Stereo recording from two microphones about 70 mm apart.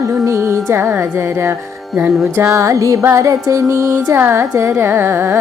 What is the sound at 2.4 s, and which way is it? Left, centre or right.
Music, right.